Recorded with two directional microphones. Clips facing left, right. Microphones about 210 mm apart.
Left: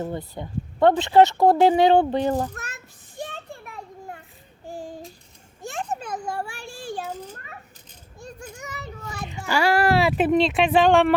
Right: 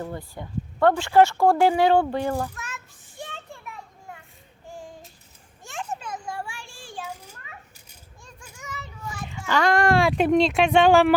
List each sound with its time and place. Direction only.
0.0 s speech: 20° left (ahead or behind)
2.6 s child singing: 40° left (ahead or behind)
5.6 s children playing: 40° left (ahead or behind)
8.6 s children playing: 40° left (ahead or behind)
9.5 s speech: 10° left (ahead or behind)